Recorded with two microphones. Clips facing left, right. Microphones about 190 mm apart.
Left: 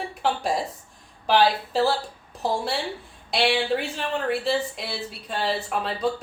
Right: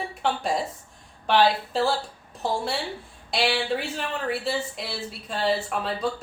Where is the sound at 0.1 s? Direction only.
Centre (ahead or behind).